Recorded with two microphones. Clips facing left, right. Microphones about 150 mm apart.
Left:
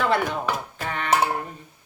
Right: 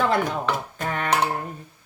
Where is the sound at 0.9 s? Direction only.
45° right (ahead or behind).